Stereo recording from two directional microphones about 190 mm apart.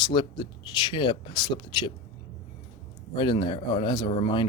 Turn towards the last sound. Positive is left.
turn(degrees=25)  # may be behind; listen again after turning